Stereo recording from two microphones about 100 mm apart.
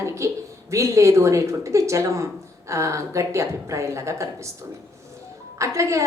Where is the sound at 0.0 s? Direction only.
30° right (ahead or behind).